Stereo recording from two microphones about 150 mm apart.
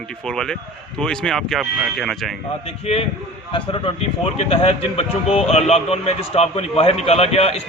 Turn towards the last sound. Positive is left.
turn(degrees=45)  # may be behind; listen again after turning